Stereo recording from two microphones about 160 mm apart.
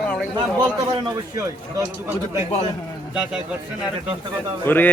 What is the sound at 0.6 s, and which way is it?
A man's voice, 20° right (ahead or behind).